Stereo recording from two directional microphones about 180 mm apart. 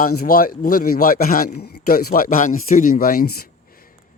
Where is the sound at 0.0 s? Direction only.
55° left (ahead or behind).